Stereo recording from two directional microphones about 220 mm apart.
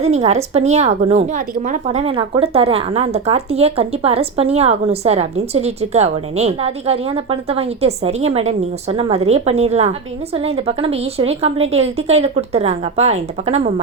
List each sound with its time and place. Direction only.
0.0 s a woman's voice: 30° right (ahead or behind)